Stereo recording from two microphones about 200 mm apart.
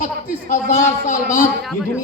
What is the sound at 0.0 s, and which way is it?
A man's voice, 40° left (ahead or behind).